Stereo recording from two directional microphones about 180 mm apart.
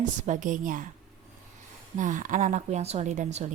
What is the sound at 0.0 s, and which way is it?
Speech, 45° right (ahead or behind).